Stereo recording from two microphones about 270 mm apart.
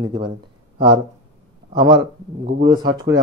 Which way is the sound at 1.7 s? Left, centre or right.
Centre.